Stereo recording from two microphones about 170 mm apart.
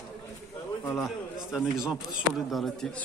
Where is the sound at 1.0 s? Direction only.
5° right (ahead or behind).